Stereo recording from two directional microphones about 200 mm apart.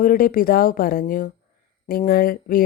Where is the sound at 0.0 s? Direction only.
45° left (ahead or behind).